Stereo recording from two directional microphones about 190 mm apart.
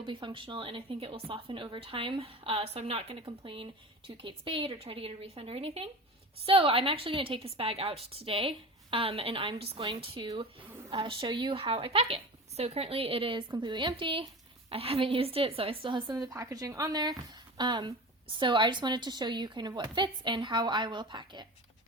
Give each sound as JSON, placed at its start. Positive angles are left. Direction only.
{"t": 0.0, "sound": "a woman's voice", "side_deg": -25}